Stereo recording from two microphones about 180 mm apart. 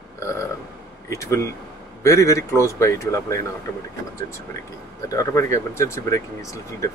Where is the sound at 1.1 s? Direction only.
15° left (ahead or behind).